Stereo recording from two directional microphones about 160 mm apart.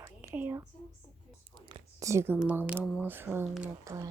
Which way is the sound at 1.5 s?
30° right (ahead or behind).